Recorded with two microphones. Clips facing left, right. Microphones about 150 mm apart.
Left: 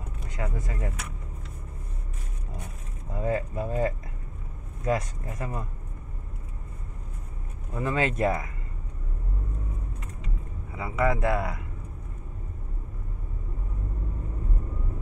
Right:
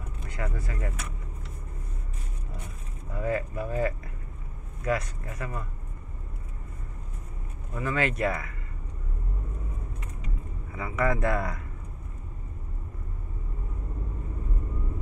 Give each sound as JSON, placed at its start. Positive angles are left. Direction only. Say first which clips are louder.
{"t": 0.4, "sound": "speech", "louder": "left 1 dB", "side_deg": 20}
{"t": 3.1, "sound": "speech", "louder": "left 1 dB", "side_deg": 20}
{"t": 7.7, "sound": "speech", "louder": "left 1 dB", "side_deg": 20}
{"t": 10.8, "sound": "speech", "louder": "left 1 dB", "side_deg": 10}